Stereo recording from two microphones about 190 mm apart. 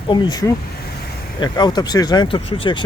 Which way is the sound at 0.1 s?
20° left (ahead or behind).